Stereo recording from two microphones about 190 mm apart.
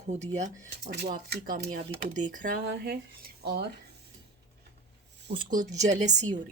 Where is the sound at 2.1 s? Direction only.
40° right (ahead or behind); by 3.7 s 60° right (ahead or behind).